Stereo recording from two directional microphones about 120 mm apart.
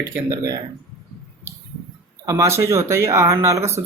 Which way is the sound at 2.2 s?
25° right (ahead or behind).